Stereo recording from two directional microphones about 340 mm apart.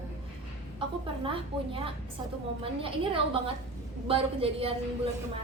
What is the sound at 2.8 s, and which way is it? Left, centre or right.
A woman's voice, centre.